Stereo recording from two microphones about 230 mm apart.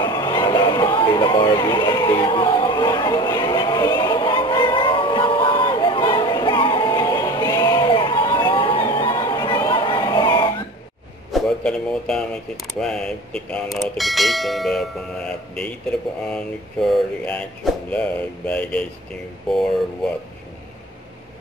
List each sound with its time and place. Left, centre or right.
0.0 s music: centre
11.3 s a sound: centre
12.8 s speech: centre